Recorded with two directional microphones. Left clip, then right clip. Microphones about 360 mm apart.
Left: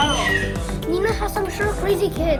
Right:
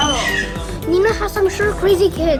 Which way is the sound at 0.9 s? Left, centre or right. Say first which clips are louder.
Right 6 dB; right.